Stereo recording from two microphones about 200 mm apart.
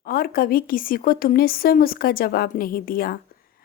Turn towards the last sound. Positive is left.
turn(degrees=45)  # may be behind; listen again after turning